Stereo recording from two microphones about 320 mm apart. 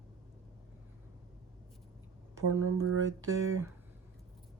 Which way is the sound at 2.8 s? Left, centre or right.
Right.